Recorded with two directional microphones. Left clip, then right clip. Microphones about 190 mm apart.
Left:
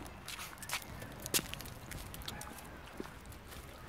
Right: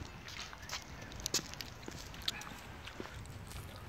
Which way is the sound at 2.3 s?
Centre (ahead or behind).